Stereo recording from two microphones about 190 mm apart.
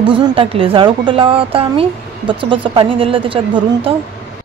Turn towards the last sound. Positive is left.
turn(degrees=-30)  # may be behind; listen again after turning